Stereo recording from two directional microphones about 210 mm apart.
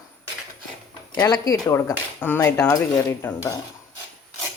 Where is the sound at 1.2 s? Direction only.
15° left (ahead or behind).